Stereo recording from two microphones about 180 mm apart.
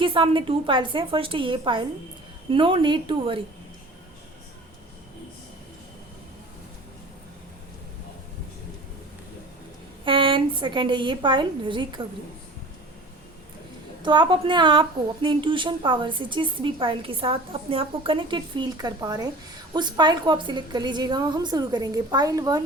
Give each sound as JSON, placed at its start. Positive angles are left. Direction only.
{"t": 0.0, "sound": "a woman's voice", "side_deg": -30}
{"t": 10.0, "sound": "a woman's voice", "side_deg": -30}
{"t": 14.0, "sound": "a woman's voice", "side_deg": -25}